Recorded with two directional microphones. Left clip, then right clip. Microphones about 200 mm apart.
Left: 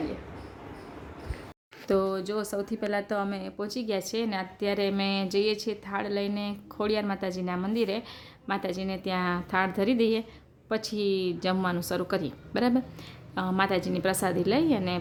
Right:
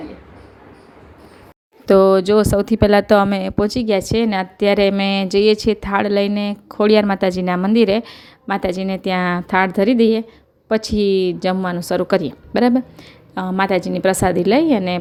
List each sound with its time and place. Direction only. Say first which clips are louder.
1.9 s speech: right 16 dB; 40° right (ahead or behind)